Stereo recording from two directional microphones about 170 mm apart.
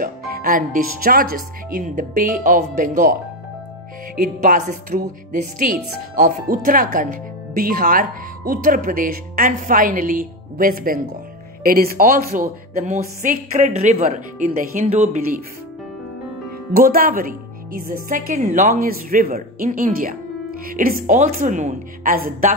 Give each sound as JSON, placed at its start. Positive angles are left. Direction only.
{"t": 0.0, "sound": "speech", "side_deg": -55}
{"t": 4.2, "sound": "speech", "side_deg": -50}
{"t": 16.7, "sound": "speech", "side_deg": -60}